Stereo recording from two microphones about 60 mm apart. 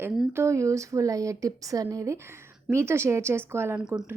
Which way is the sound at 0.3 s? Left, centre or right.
Right.